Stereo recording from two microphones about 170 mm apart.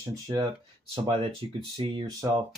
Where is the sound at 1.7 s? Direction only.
30° right (ahead or behind).